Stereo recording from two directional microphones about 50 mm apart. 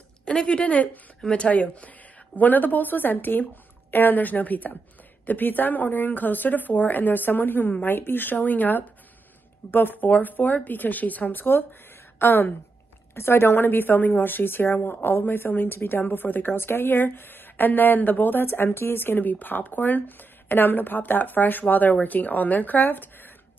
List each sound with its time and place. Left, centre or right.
0.2 s a woman's voice: left